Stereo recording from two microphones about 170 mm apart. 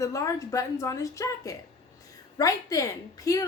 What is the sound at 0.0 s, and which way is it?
A woman's voice, 20° left (ahead or behind).